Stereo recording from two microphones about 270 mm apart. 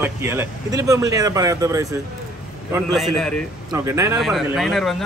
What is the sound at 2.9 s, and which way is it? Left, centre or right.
Speech, centre.